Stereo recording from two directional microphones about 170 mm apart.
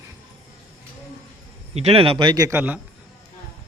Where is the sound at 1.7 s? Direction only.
35° right (ahead or behind); by 2.8 s 10° right (ahead or behind).